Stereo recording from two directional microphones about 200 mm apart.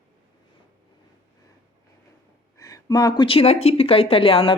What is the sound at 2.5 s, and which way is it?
Speech, 15° left (ahead or behind).